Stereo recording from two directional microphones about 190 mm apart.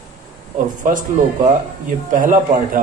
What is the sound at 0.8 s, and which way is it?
Speech, 45° right (ahead or behind).